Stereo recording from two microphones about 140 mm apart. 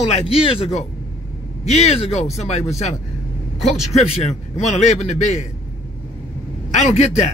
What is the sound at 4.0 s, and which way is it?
Speech, 50° left (ahead or behind).